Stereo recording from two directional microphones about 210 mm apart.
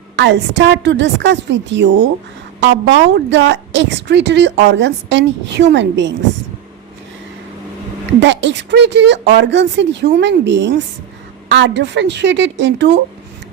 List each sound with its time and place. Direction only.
0.2 s a woman's voice: 55° right (ahead or behind)
8.2 s a woman's voice: 55° right (ahead or behind)